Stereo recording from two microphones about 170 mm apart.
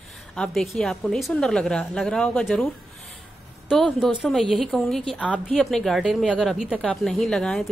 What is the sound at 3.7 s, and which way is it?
A woman's voice, centre (ahead or behind).